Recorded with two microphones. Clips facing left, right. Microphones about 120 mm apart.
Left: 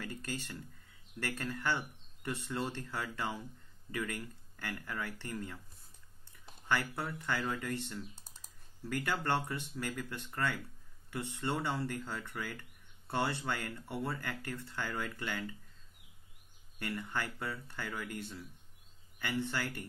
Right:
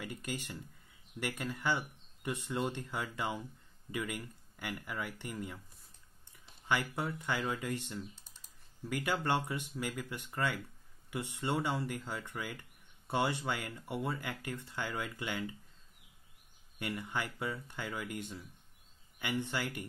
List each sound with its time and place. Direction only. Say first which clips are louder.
0.0 s speech: even; 15° right (ahead or behind)
6.7 s speech: right 1 dB; 15° right (ahead or behind)
16.7 s speech: even; 15° right (ahead or behind)